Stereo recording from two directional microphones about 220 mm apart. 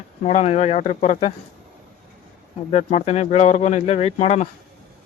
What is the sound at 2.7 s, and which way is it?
Speech, 30° left (ahead or behind).